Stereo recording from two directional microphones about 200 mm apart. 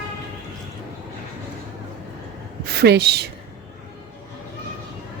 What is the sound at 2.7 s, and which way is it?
Speech, 55° right (ahead or behind).